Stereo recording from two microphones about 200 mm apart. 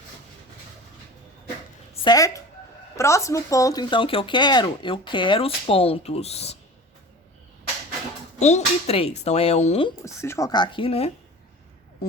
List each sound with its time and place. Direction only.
2.0 s a sound: 15° left (ahead or behind)
2.9 s speech: 15° left (ahead or behind); by 6.6 s 30° left (ahead or behind)
8.4 s speech: 35° left (ahead or behind)
10.0 s speech: 15° left (ahead or behind)